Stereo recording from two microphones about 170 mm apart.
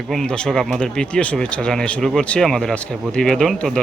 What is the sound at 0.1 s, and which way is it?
Speech, 5° left (ahead or behind).